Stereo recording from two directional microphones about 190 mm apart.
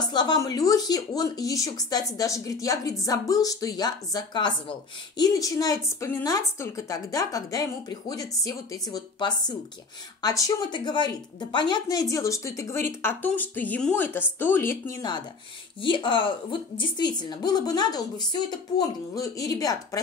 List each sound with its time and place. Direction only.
0.0 s a woman's voice: 20° left (ahead or behind)